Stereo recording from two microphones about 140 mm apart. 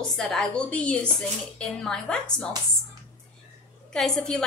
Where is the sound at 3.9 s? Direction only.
5° left (ahead or behind).